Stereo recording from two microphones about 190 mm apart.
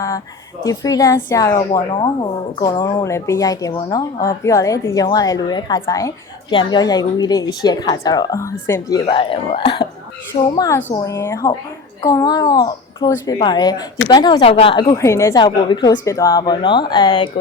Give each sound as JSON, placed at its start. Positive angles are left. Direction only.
{"t": 0.6, "sound": "a woman's voice", "side_deg": 20}